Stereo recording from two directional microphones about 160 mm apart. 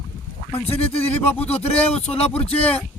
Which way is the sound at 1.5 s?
40° left (ahead or behind).